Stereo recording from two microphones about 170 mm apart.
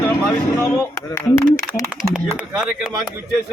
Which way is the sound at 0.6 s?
15° left (ahead or behind).